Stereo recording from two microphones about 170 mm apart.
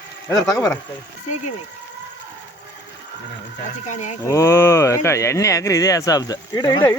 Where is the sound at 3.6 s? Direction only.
45° left (ahead or behind).